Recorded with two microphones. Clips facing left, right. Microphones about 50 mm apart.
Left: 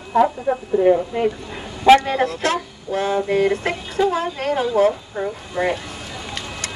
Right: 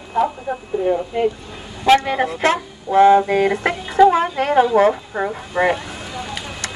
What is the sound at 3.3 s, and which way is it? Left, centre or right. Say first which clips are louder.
Speech: right 1 dB; right.